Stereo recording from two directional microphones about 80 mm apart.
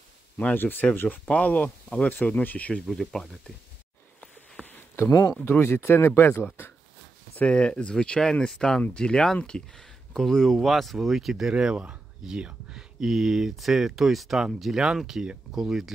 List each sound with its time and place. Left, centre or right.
0.4 s speech: left
2.9 s speech: centre
5.4 s speech: left
7.3 s speech: centre